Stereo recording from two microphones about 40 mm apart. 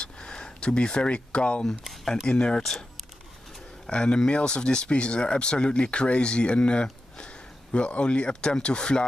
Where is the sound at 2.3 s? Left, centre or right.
Left.